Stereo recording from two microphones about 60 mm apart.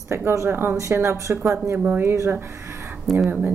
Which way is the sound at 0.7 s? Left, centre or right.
Right.